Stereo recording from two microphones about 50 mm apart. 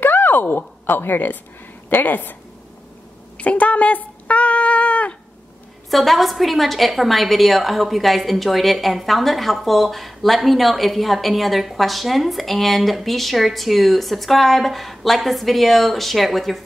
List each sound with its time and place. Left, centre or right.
0.0 s a woman's voice: left
3.3 s speech: left
5.9 s a woman's voice: centre